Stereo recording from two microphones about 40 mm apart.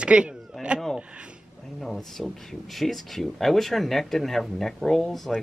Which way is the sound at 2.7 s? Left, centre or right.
Centre.